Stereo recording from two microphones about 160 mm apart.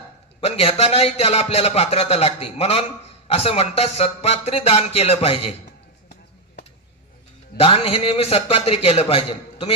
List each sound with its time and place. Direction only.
0.4 s a man's voice: 40° left (ahead or behind)
7.5 s a man's voice: 40° left (ahead or behind)